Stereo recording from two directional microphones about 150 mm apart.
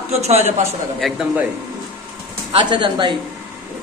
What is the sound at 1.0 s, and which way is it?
Speech, centre (ahead or behind).